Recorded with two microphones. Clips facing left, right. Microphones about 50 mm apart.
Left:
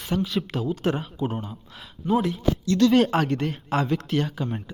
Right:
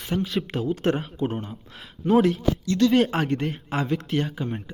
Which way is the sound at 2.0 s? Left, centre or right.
Right.